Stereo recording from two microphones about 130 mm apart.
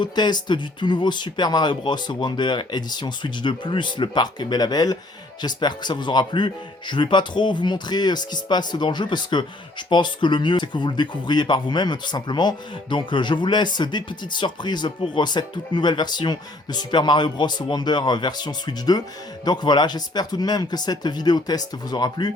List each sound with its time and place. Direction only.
0.0 s speech: 35° left (ahead or behind)